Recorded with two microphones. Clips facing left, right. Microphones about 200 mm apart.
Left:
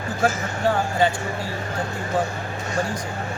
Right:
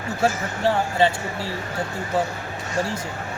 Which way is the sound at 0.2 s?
25° right (ahead or behind).